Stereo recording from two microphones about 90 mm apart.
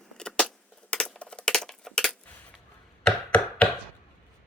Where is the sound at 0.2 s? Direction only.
10° left (ahead or behind).